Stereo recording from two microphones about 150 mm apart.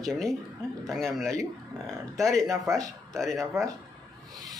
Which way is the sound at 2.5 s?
20° right (ahead or behind).